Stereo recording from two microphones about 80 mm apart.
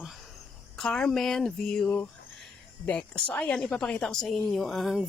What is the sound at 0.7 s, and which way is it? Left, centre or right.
Speech, centre.